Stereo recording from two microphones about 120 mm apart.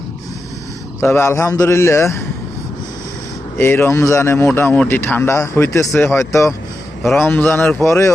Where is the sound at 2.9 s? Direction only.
30° left (ahead or behind).